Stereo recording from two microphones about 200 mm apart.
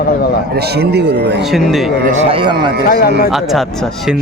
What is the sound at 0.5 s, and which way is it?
Speech, 55° right (ahead or behind).